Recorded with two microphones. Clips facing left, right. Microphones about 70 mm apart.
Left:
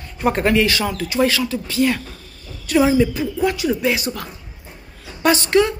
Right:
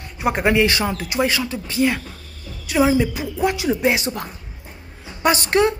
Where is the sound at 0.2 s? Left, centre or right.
Centre.